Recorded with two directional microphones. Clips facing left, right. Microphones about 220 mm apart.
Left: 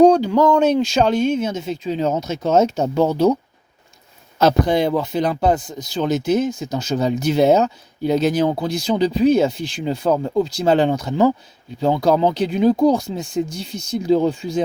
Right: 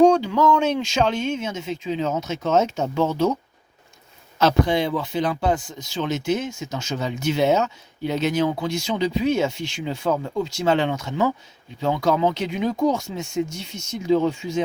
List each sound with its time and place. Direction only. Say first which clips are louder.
0.0 s speech: left 4 dB; 35° left (ahead or behind)
4.4 s speech: left 3 dB; 40° left (ahead or behind)